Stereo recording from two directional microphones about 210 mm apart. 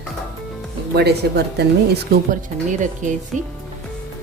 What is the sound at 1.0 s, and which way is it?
Speech, 50° right (ahead or behind).